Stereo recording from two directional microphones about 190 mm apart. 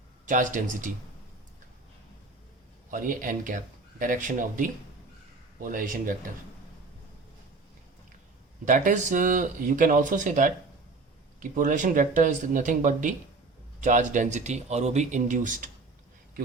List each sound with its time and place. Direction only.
0.3 s speech: 40° right (ahead or behind)
2.9 s speech: 45° right (ahead or behind)
8.6 s speech: 40° right (ahead or behind)